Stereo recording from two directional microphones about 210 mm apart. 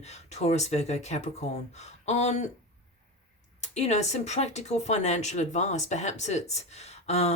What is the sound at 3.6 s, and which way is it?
Speech, 30° left (ahead or behind).